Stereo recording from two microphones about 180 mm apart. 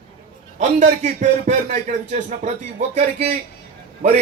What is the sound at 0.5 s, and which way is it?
A man's voice, 40° right (ahead or behind).